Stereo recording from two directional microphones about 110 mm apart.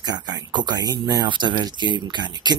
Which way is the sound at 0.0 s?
40° right (ahead or behind).